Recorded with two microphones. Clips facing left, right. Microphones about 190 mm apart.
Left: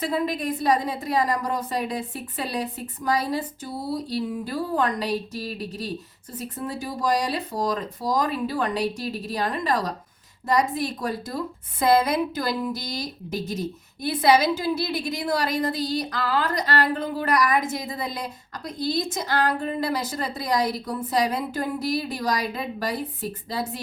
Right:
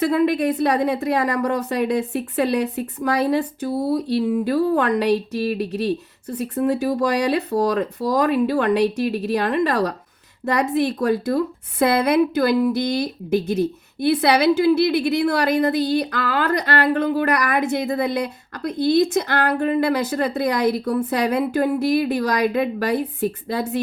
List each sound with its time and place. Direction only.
0.0 s a woman's voice: 65° right (ahead or behind)